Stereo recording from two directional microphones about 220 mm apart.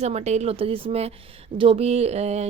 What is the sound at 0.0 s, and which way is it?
Speech, 30° right (ahead or behind).